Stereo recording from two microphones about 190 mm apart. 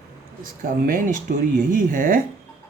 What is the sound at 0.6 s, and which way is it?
Speech, 45° right (ahead or behind).